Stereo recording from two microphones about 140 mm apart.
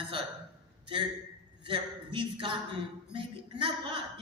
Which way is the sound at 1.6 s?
35° right (ahead or behind).